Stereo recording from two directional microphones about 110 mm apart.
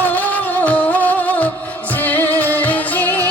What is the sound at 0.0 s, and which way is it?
Music, 15° left (ahead or behind).